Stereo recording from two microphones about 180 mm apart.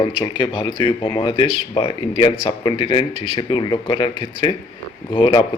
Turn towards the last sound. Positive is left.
turn(degrees=25)  # may be behind; listen again after turning